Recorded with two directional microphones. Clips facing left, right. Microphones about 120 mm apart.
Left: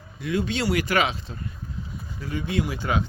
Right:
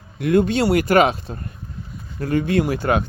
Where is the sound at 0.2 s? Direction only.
55° right (ahead or behind).